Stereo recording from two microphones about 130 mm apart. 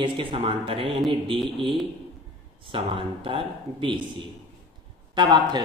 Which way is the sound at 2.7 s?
45° right (ahead or behind).